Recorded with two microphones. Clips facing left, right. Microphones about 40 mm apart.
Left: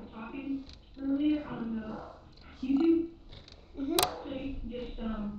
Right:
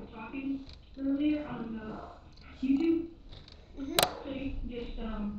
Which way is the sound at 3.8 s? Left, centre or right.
Centre.